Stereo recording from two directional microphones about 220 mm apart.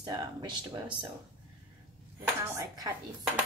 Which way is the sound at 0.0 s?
20° right (ahead or behind).